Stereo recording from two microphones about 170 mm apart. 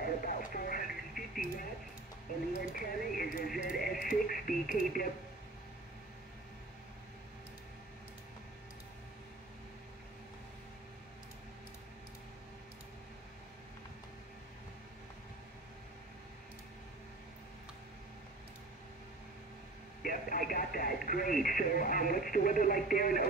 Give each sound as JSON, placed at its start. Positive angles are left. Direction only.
{"t": 0.0, "sound": "radio", "side_deg": 55}
{"t": 2.5, "sound": "a sound", "side_deg": 55}
{"t": 3.5, "sound": "radio", "side_deg": 60}
{"t": 20.0, "sound": "speech", "side_deg": 55}